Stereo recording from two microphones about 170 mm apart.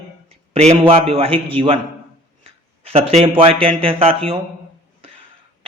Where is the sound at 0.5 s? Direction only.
40° right (ahead or behind).